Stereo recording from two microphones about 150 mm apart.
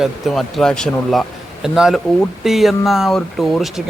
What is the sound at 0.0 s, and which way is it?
Speech, centre (ahead or behind).